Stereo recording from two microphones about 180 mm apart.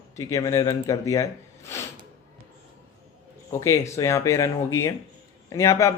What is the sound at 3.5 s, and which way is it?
Speech, 15° left (ahead or behind).